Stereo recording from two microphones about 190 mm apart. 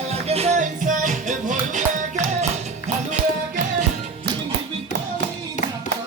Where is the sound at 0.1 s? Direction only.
35° right (ahead or behind).